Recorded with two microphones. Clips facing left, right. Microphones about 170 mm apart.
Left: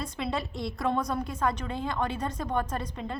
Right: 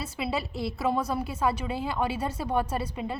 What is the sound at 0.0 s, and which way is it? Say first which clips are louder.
A woman's voice: right 1 dB; 5° right (ahead or behind).